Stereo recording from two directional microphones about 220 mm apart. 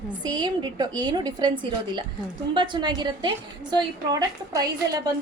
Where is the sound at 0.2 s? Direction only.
20° right (ahead or behind).